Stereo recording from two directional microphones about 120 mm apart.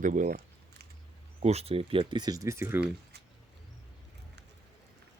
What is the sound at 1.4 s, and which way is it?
Speech, 60° right (ahead or behind).